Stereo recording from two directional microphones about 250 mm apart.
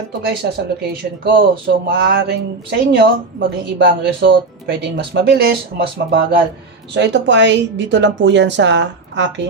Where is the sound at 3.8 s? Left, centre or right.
Right.